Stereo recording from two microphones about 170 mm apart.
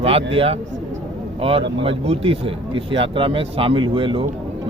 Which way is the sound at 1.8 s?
35° right (ahead or behind).